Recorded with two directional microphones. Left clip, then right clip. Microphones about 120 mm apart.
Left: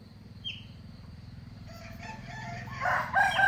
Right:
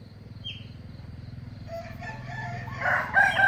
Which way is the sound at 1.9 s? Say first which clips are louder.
Right 5 dB; 60° right (ahead or behind).